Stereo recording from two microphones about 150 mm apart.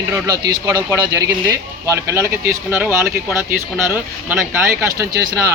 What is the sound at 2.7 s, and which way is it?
Speech, 5° right (ahead or behind).